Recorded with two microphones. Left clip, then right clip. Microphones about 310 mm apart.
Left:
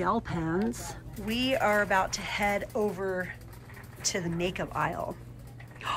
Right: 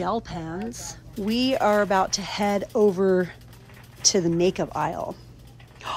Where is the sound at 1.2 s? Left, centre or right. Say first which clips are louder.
Right 5 dB; centre.